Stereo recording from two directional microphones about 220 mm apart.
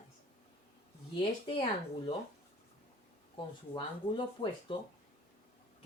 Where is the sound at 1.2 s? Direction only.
25° left (ahead or behind).